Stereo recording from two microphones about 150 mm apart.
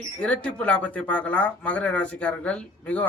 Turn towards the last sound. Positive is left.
turn(degrees=10)  # may be behind; listen again after turning